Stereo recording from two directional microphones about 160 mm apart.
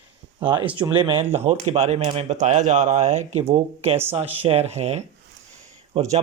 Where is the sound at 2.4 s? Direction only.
45° right (ahead or behind).